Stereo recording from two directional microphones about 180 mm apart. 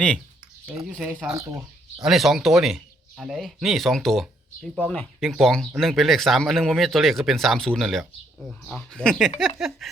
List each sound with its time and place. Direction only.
0.7 s speech: 5° right (ahead or behind)
1.3 s speech: 15° right (ahead or behind)
2.0 s speech: centre (ahead or behind)